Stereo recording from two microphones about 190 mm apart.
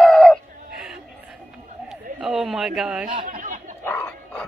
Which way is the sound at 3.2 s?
40° right (ahead or behind).